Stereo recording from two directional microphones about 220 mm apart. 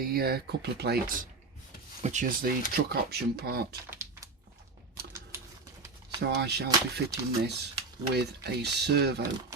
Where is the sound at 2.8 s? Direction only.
50° right (ahead or behind).